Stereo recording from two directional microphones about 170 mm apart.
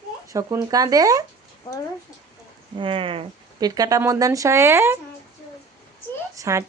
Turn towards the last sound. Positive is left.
turn(degrees=-20)  # may be behind; listen again after turning